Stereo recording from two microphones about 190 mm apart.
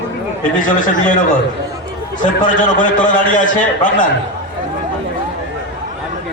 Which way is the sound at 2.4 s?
40° left (ahead or behind).